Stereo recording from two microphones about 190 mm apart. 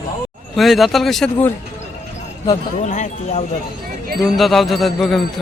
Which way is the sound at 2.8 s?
40° left (ahead or behind).